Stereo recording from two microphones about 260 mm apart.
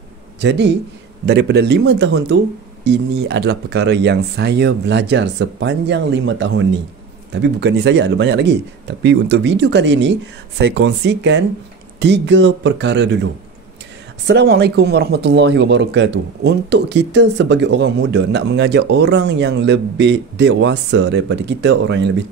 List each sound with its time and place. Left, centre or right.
0.4 s speech: right
14.2 s speech: right